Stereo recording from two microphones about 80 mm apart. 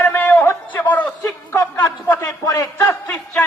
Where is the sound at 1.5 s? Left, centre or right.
Left.